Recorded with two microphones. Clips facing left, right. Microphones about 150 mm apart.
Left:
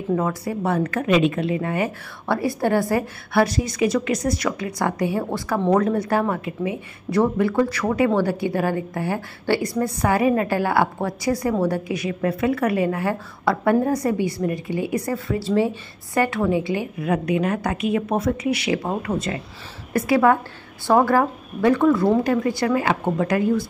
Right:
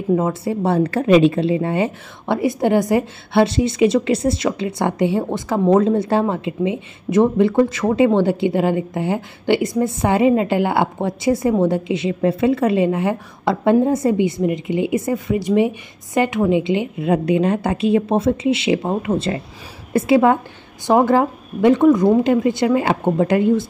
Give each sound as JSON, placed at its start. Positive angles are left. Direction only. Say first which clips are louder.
{"t": 0.1, "sound": "a woman's voice", "louder": "right 4 dB", "side_deg": -25}